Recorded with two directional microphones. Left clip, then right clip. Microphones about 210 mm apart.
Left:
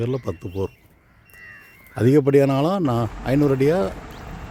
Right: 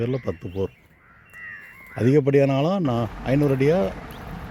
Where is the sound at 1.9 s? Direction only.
10° left (ahead or behind).